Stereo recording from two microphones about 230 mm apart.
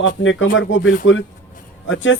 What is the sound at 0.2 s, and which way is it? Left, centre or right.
A man's voice, left.